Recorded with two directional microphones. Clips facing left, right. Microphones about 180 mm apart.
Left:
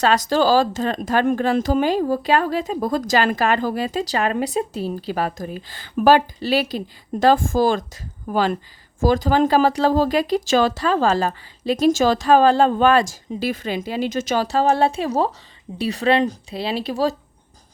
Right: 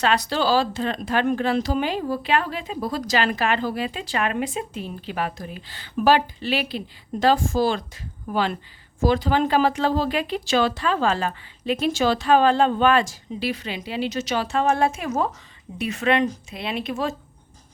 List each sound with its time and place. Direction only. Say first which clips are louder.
0.0 s speech: left 4 dB; 40° left (ahead or behind)